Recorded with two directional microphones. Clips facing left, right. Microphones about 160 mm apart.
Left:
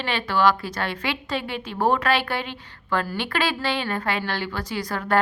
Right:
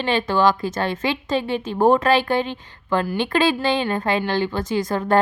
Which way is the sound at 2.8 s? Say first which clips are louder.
Right 5 dB; 15° right (ahead or behind).